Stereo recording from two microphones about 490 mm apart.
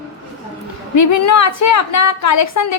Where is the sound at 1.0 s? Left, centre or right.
Left.